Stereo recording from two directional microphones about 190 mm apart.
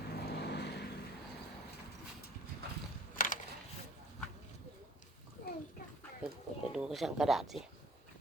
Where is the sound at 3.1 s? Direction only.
45° left (ahead or behind).